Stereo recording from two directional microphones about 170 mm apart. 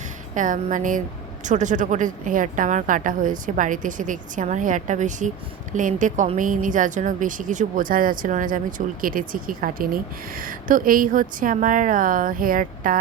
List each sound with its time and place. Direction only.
0.3 s speech: 50° right (ahead or behind)